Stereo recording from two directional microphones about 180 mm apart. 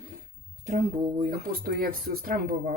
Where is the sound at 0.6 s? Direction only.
40° right (ahead or behind).